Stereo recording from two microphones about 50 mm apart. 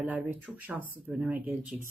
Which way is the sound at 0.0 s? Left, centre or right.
Right.